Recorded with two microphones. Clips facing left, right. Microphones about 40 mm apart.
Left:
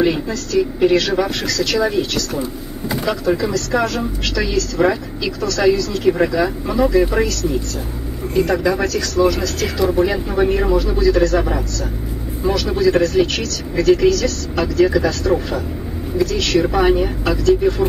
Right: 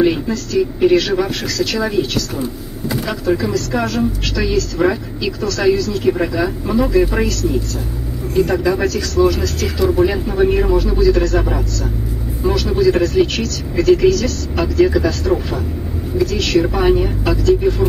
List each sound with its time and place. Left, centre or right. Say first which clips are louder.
0.0 s speech: right 2 dB; centre
8.4 s speech: right 1 dB; centre